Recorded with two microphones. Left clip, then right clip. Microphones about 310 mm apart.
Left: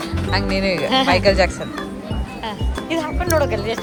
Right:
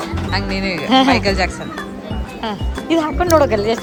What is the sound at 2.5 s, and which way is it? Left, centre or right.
Music, right.